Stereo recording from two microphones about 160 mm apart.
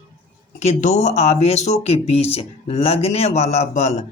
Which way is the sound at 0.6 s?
45° left (ahead or behind).